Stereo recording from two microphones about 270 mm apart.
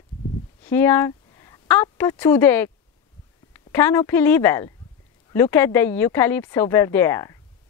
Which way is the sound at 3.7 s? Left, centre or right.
Centre.